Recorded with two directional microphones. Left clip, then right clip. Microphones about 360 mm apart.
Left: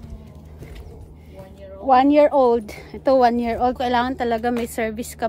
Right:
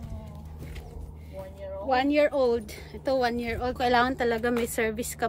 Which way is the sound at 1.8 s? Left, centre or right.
Centre.